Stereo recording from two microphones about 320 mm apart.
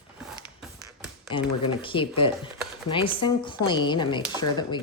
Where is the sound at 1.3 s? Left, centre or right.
Centre.